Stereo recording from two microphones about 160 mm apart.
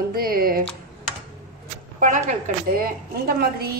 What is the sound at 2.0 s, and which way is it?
A woman's voice, 55° right (ahead or behind).